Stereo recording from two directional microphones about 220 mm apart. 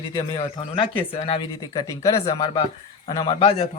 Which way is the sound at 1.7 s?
15° left (ahead or behind).